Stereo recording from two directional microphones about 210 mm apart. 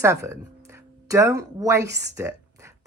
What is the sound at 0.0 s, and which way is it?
Speech, 15° right (ahead or behind).